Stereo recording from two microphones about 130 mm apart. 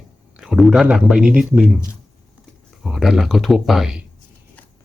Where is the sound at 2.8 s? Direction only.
Centre (ahead or behind).